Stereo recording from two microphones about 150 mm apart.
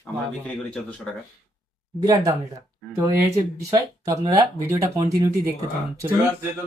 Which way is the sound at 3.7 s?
25° right (ahead or behind).